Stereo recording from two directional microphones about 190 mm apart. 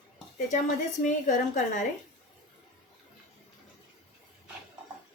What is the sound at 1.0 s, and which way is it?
Speech, 40° left (ahead or behind).